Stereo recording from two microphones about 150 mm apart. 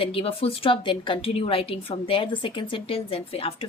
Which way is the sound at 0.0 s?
35° left (ahead or behind).